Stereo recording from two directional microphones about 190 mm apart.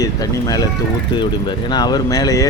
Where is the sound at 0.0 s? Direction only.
20° left (ahead or behind).